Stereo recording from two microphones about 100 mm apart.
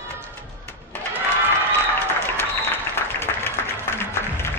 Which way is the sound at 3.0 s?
20° left (ahead or behind).